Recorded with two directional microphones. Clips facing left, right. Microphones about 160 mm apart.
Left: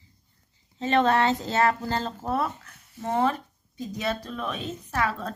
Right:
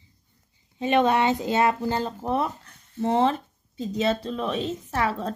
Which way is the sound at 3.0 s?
25° right (ahead or behind).